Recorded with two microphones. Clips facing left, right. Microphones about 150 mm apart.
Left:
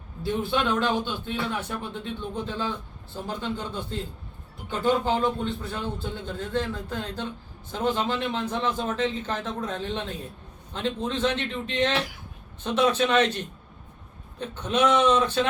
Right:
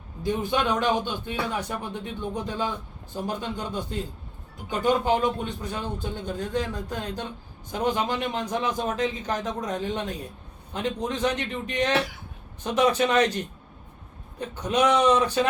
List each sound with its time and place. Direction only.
0.2 s a man's voice: 15° right (ahead or behind)